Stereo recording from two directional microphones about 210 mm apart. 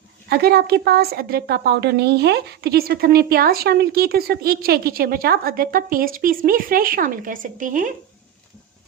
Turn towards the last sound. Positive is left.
turn(degrees=-40)  # may be behind; listen again after turning